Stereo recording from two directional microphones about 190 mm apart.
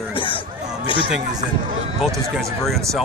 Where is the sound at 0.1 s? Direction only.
25° left (ahead or behind).